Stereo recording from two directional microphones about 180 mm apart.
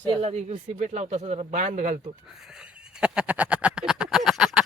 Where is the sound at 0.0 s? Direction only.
30° right (ahead or behind).